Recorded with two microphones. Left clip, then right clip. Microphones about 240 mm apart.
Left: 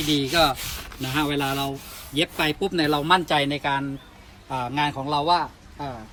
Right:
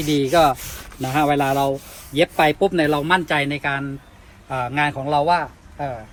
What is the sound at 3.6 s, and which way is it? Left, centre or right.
Speech, right.